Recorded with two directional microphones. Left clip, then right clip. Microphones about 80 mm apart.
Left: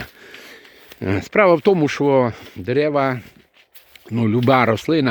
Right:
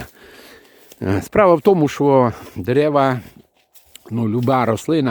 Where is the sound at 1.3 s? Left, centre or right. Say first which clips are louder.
Right 1 dB; right.